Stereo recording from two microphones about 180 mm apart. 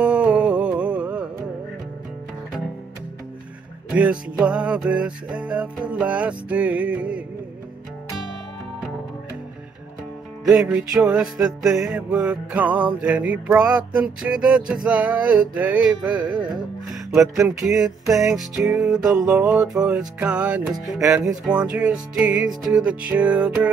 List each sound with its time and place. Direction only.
0.0 s music: 5° right (ahead or behind)
3.9 s music: 5° right (ahead or behind)
10.4 s music: centre (ahead or behind)
17.5 s music: 5° right (ahead or behind)